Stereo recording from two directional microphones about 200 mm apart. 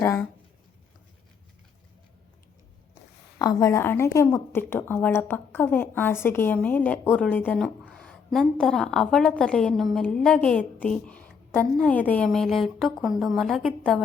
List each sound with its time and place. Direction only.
0.0 s a woman's voice: 10° left (ahead or behind)
3.3 s a woman's voice: 15° left (ahead or behind)